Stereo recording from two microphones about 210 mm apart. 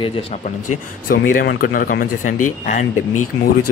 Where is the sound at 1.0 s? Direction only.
45° left (ahead or behind).